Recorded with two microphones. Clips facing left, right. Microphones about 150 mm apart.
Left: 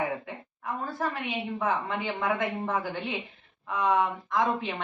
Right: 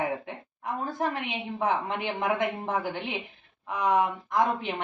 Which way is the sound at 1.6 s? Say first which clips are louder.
Right 2 dB; 20° right (ahead or behind).